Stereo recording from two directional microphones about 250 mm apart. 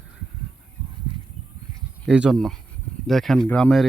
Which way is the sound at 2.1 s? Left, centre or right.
Centre.